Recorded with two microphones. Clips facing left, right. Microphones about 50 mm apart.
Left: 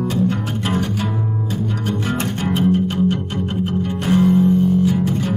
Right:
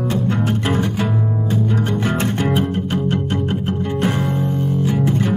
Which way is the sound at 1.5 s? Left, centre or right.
Right.